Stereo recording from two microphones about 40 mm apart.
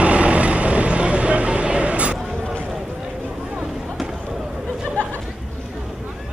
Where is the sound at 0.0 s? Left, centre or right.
Right.